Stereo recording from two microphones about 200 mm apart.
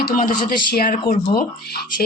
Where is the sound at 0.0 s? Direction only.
40° left (ahead or behind).